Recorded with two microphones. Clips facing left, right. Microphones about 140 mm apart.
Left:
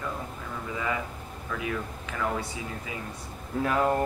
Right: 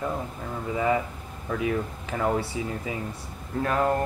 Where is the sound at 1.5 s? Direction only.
35° right (ahead or behind).